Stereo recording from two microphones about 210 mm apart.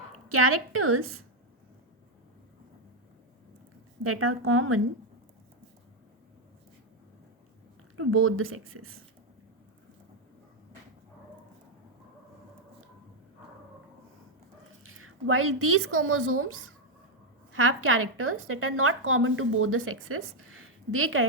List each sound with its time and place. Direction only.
0.3 s a woman's voice: 85° right
4.0 s a woman's voice: 85° right
7.9 s speech: 80° right
14.8 s a woman's voice: 85° right
17.5 s a woman's voice: 85° right